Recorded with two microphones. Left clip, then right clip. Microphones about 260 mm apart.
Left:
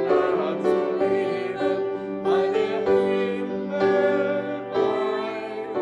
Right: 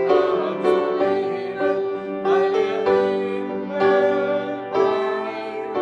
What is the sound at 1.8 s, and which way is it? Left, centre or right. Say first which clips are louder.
Music: right 3 dB; right.